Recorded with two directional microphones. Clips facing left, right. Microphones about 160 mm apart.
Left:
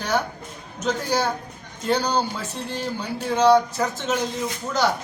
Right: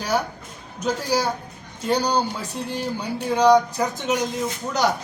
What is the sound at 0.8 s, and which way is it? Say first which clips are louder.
Speech: even; 10° right (ahead or behind).